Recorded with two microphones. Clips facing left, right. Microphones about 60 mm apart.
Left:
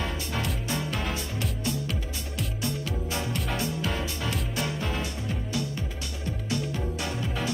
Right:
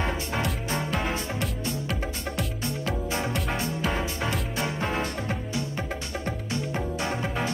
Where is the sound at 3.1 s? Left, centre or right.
Right.